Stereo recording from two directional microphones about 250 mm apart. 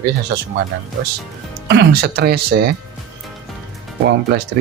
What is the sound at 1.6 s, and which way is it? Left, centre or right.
Speech, right.